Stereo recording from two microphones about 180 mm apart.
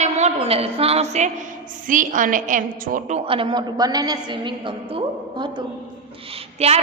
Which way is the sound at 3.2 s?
30° right (ahead or behind).